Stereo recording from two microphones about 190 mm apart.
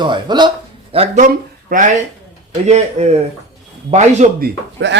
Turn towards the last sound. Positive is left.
turn(degrees=-70)  # may be behind; listen again after turning